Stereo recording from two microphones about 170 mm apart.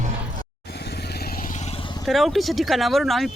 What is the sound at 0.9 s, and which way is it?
Vehicle, 65° left (ahead or behind).